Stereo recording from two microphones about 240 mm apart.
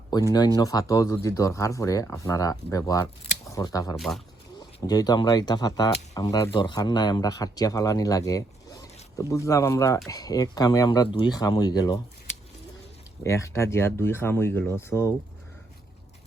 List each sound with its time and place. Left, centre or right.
0.1 s speech: centre
3.9 s speech: centre
4.5 s speech: centre
13.2 s speech: centre